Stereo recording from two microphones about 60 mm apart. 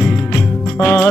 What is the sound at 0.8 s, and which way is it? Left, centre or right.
Music, left.